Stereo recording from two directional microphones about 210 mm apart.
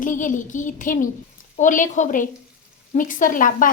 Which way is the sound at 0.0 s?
40° left (ahead or behind).